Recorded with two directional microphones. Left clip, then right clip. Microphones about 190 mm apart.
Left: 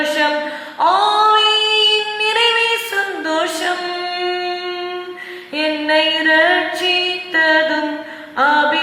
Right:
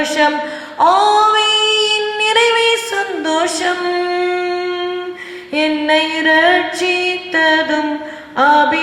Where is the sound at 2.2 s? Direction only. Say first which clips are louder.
Right 5 dB; 50° right (ahead or behind).